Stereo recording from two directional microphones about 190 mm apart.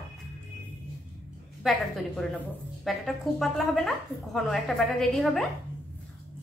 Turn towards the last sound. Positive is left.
turn(degrees=0)  # may be behind; listen again after turning